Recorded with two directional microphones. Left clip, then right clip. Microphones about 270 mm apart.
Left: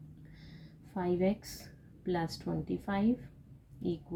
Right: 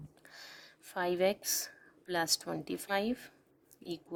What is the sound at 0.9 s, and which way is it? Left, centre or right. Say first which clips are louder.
Speech: right 2 dB; right.